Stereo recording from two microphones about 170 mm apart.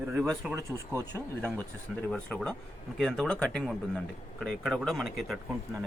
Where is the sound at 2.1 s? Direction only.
5° left (ahead or behind).